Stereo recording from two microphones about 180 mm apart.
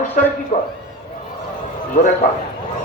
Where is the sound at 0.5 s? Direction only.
35° left (ahead or behind).